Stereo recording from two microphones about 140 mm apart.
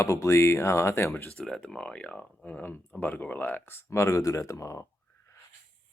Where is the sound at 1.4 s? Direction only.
5° left (ahead or behind).